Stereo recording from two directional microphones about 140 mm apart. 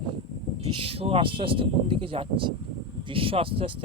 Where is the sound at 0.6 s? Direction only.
45° right (ahead or behind).